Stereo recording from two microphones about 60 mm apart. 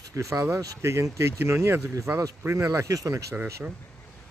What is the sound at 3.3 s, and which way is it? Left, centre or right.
Speech, right.